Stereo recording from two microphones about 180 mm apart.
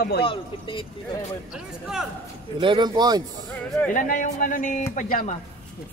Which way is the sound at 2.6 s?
25° right (ahead or behind).